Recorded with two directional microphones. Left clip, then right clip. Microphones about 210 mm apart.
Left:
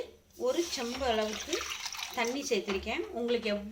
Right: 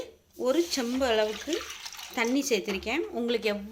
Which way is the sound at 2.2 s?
50° right (ahead or behind).